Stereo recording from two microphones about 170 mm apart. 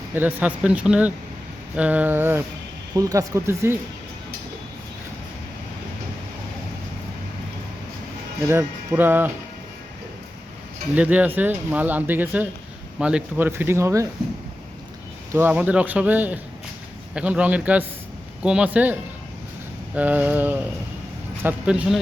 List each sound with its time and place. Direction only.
0.1 s speech: 10° right (ahead or behind)
8.4 s speech: 15° right (ahead or behind)
10.9 s speech: 10° right (ahead or behind)
15.3 s speech: 10° right (ahead or behind)
20.0 s speech: 10° right (ahead or behind)